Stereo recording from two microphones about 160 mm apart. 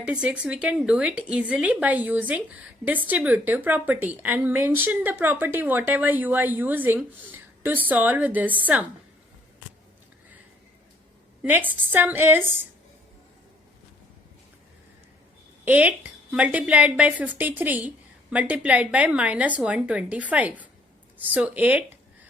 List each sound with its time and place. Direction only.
0.0 s a woman's voice: 5° right (ahead or behind)
11.4 s a woman's voice: 10° right (ahead or behind)
15.6 s a woman's voice: 10° right (ahead or behind)